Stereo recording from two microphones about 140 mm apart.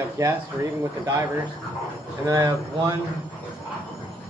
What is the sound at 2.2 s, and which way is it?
Speech, 25° right (ahead or behind).